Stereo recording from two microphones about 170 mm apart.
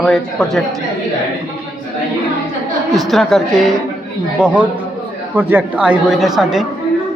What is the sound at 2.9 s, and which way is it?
A man's voice, centre (ahead or behind).